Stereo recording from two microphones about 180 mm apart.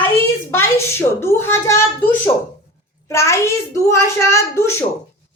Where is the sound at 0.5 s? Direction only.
15° left (ahead or behind).